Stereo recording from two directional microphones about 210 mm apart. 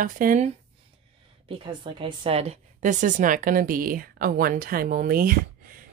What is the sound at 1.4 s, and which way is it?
A woman's voice, 25° right (ahead or behind).